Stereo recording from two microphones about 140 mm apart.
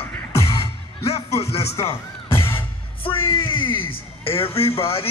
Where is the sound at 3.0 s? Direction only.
40° left (ahead or behind).